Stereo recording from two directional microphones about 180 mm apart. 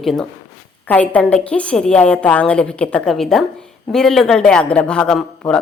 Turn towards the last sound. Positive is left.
turn(degrees=5)  # may be behind; listen again after turning